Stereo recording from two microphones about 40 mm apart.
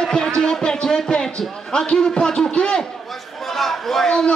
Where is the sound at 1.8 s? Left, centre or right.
Left.